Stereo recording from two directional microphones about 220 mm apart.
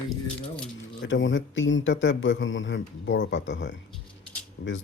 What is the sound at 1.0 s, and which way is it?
A man's voice, 55° left (ahead or behind).